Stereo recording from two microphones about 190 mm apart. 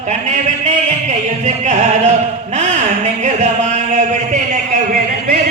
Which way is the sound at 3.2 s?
35° right (ahead or behind).